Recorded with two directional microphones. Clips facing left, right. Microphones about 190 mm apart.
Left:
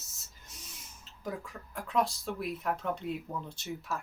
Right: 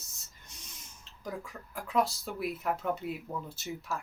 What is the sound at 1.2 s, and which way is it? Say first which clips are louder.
Speech: left 1 dB; centre (ahead or behind).